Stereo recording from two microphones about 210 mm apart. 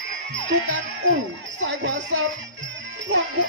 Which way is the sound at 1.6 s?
60° right (ahead or behind).